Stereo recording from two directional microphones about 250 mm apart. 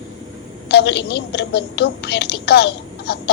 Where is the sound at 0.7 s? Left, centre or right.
Left.